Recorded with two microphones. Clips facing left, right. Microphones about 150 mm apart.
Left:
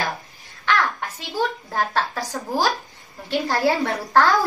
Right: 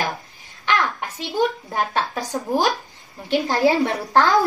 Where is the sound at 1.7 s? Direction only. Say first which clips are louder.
Even; 15° right (ahead or behind).